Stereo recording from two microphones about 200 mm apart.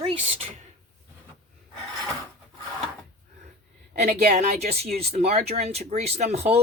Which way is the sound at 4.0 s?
35° right (ahead or behind).